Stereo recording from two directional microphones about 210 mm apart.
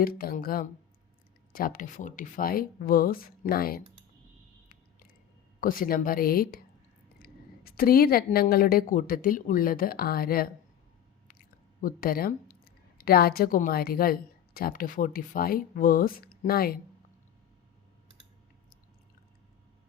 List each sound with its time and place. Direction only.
0.2 s a woman's voice: 45° left (ahead or behind)
5.5 s a woman's voice: 40° left (ahead or behind)